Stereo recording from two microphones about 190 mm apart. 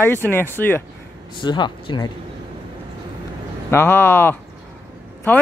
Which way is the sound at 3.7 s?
10° left (ahead or behind).